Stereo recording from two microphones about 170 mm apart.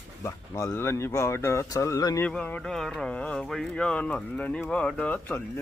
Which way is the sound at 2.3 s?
10° left (ahead or behind).